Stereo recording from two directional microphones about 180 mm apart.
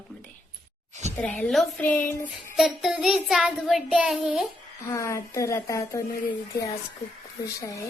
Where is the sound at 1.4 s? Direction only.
Centre (ahead or behind).